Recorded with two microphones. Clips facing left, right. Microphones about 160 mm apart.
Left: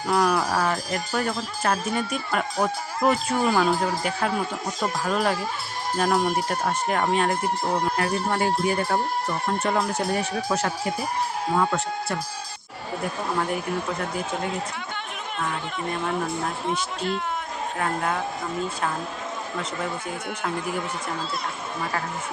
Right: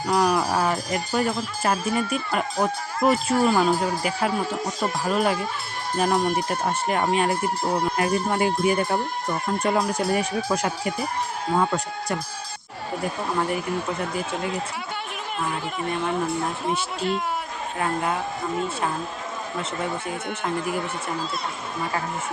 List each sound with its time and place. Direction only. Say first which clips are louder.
0.1 s music: right 1 dB; centre (ahead or behind)
0.5 s speech: right 1 dB; 10° right (ahead or behind)
6.7 s speech: right 1 dB; 10° right (ahead or behind)
16.6 s speech: right 1 dB; 5° right (ahead or behind)
19.8 s speech: right 2 dB; centre (ahead or behind)